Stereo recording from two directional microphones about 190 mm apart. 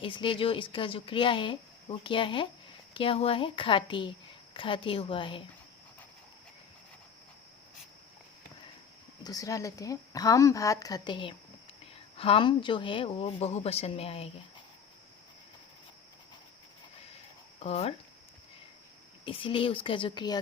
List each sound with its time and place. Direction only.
0.0 s speech: 25° left (ahead or behind)
9.2 s a woman's voice: 20° left (ahead or behind)
17.6 s speech: 35° left (ahead or behind)
19.2 s speech: 30° left (ahead or behind)